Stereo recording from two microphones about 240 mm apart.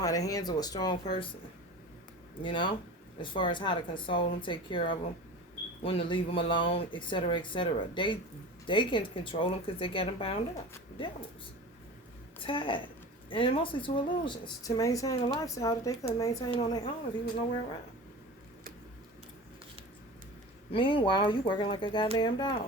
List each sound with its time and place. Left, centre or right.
0.0 s speech: centre
2.4 s speech: centre
12.4 s speech: left
20.7 s speech: left